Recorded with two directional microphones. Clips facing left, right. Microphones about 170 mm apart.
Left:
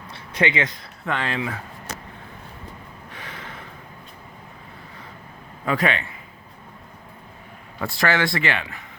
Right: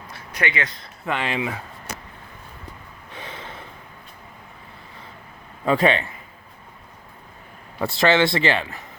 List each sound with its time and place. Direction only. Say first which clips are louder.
0.1 s a sound: left 4 dB; 25° left (ahead or behind)
1.0 s speech: right 1 dB; 15° right (ahead or behind)
3.2 s snort: right 3 dB; 25° right (ahead or behind)
5.6 s a man's voice: right 4 dB; 30° right (ahead or behind)
7.8 s a man's voice: right 4 dB; 25° right (ahead or behind)